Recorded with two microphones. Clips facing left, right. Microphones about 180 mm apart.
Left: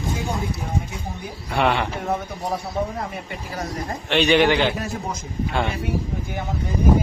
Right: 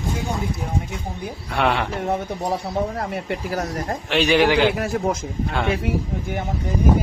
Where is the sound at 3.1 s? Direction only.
75° right (ahead or behind).